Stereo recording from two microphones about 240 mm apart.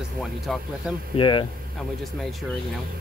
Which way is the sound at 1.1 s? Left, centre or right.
Centre.